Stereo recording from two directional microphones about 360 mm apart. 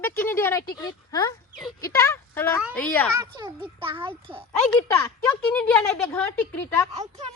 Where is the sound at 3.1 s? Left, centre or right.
Centre.